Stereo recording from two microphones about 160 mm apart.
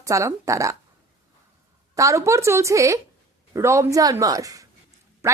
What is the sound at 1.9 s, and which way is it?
A woman's voice, 20° right (ahead or behind).